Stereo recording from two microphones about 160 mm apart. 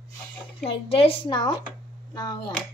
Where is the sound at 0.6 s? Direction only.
35° left (ahead or behind).